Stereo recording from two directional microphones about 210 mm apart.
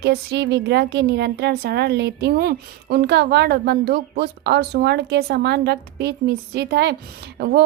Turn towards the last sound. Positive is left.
turn(degrees=-50)  # may be behind; listen again after turning